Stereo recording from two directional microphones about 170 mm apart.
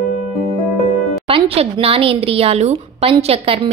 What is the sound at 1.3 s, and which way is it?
A woman's voice, 35° right (ahead or behind).